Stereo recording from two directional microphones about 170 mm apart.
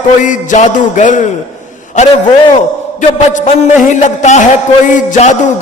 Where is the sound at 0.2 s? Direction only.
45° left (ahead or behind).